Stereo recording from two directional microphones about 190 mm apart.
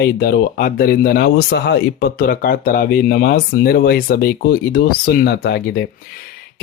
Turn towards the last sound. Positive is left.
turn(degrees=60)  # may be behind; listen again after turning